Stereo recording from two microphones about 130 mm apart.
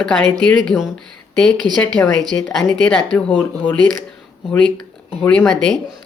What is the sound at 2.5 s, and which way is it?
Speech, 5° left (ahead or behind).